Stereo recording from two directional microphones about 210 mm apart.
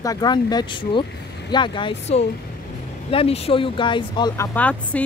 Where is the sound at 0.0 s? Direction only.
20° left (ahead or behind).